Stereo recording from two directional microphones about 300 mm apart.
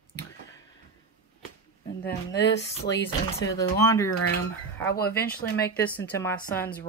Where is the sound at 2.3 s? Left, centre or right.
Left.